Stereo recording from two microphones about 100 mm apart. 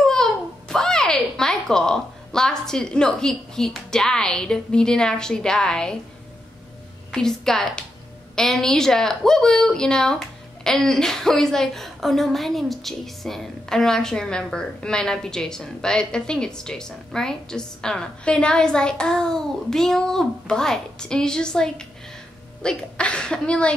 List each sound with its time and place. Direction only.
0.0 s a child's voice: 5° left (ahead or behind)
7.1 s a woman's voice: 5° left (ahead or behind)